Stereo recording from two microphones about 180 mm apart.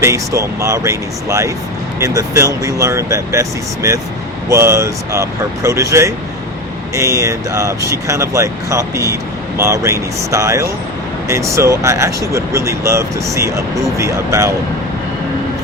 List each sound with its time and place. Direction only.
0.0 s speech: 15° right (ahead or behind)
4.4 s speech: 15° right (ahead or behind)